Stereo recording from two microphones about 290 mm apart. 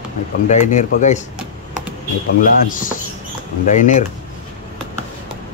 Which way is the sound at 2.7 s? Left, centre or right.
Left.